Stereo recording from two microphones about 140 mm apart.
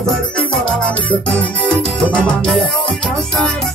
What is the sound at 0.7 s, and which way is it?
Music, 10° left (ahead or behind).